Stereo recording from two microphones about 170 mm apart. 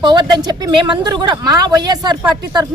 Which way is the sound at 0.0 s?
25° right (ahead or behind).